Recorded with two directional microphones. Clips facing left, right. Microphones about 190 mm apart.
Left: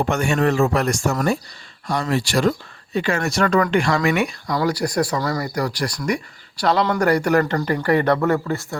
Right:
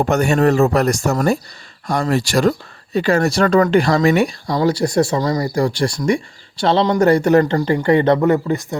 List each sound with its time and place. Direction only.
0.1 s speech: 40° right (ahead or behind); by 8.6 s 20° right (ahead or behind)